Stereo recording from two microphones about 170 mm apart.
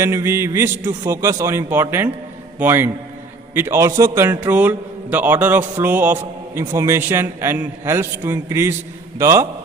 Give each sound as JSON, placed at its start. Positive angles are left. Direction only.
{"t": 0.0, "sound": "a man's voice", "side_deg": -15}